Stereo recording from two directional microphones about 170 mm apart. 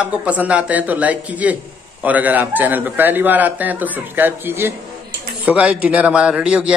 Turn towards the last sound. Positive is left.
turn(degrees=-5)  # may be behind; listen again after turning